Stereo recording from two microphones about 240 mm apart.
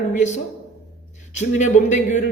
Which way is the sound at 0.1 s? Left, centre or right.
Left.